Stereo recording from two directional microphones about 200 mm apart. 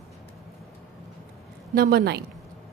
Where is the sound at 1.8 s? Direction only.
50° right (ahead or behind).